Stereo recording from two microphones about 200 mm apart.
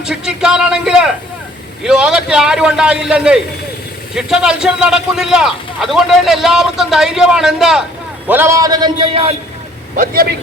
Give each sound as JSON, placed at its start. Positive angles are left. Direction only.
{"t": 0.0, "sound": "a man's voice", "side_deg": -5}
{"t": 9.9, "sound": "a man's voice", "side_deg": -45}